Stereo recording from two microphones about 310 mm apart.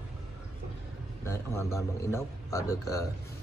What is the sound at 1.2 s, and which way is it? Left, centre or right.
A man's voice, centre.